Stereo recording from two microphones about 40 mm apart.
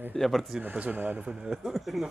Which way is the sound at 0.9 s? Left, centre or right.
Right.